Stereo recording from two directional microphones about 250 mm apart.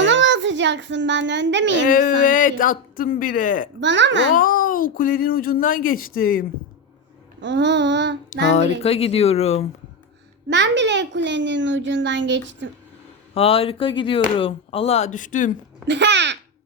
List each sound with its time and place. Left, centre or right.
0.0 s a child's voice: right
1.9 s speech: left
3.8 s a child's voice: right
4.4 s speech: left
7.4 s a child's voice: right
8.5 s speech: left
10.5 s a child's voice: right
13.3 s speech: left
15.9 s a child's voice: right